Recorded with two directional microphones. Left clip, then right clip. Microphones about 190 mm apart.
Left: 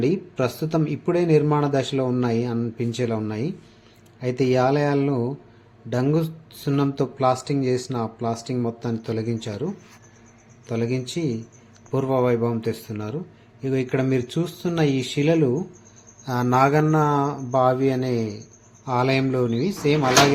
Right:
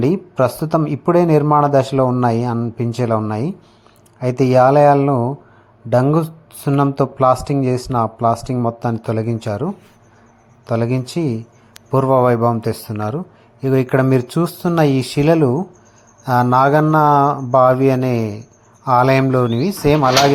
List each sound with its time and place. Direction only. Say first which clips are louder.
0.0 s speech: right 7 dB; 30° right (ahead or behind)
10.7 s speech: right 7 dB; 30° right (ahead or behind)